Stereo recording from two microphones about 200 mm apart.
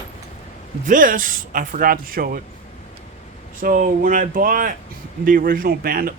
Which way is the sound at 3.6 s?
45° right (ahead or behind).